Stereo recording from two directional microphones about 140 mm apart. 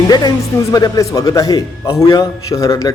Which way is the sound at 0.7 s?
25° left (ahead or behind).